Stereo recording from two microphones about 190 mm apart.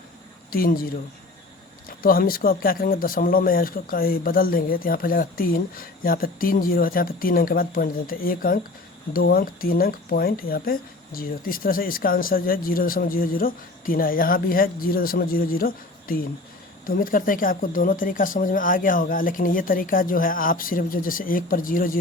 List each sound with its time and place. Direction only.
0.5 s speech: 50° left (ahead or behind)
2.0 s speech: 50° left (ahead or behind)